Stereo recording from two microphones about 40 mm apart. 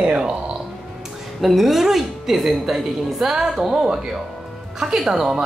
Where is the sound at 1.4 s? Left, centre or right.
Centre.